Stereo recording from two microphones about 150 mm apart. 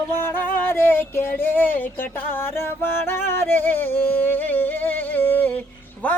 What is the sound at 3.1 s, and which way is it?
Music, 15° left (ahead or behind).